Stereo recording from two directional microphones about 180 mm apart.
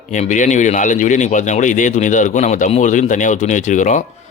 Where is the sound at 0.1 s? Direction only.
45° left (ahead or behind).